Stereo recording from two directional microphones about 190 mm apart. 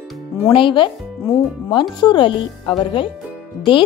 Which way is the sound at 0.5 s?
25° left (ahead or behind).